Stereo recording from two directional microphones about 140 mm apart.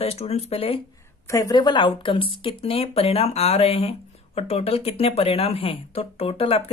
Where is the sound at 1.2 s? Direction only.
25° left (ahead or behind).